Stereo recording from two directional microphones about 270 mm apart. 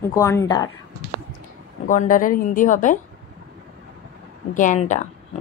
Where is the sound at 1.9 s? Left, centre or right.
Left.